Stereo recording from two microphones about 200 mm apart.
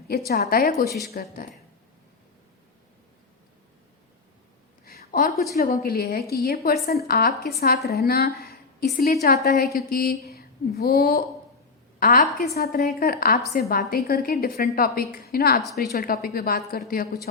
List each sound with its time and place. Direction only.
0.3 s a woman's voice: 50° left (ahead or behind)
0.9 s a woman's voice: centre (ahead or behind)
1.1 s a woman's voice: 50° left (ahead or behind)
4.9 s a sound: 45° left (ahead or behind)
5.5 s a woman's voice: 45° left (ahead or behind)
15.6 s a woman's voice: centre (ahead or behind)
15.9 s a woman's voice: 50° left (ahead or behind)